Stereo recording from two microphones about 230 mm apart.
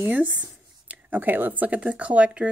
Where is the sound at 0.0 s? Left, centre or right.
Centre.